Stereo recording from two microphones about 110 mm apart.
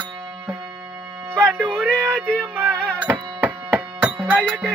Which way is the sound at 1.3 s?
10° right (ahead or behind).